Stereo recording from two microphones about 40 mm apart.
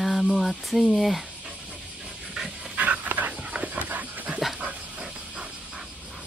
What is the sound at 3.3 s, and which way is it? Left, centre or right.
Dog, right.